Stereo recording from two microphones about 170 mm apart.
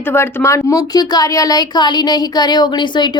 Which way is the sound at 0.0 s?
10° left (ahead or behind).